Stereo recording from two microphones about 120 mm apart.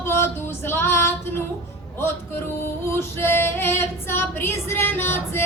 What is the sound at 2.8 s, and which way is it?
Female singing, 20° left (ahead or behind).